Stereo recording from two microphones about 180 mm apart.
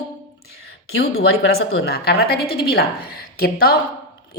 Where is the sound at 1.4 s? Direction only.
65° left (ahead or behind).